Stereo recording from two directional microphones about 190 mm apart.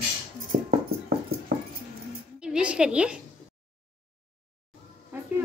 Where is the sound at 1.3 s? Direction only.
55° right (ahead or behind).